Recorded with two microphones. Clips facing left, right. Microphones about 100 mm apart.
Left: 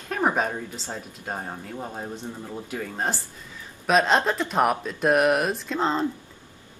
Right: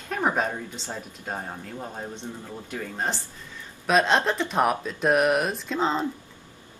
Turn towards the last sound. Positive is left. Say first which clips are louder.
# left 1 dB
turn(degrees=0)  # may be behind; listen again after turning